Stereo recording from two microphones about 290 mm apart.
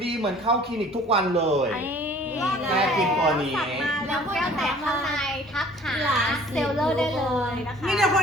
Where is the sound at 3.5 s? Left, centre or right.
Centre.